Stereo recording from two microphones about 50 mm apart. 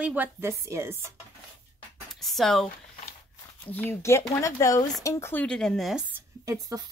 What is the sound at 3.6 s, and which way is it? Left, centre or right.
Speech, left.